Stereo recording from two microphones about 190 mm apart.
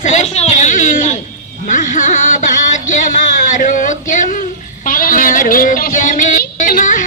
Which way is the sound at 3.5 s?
45° left (ahead or behind).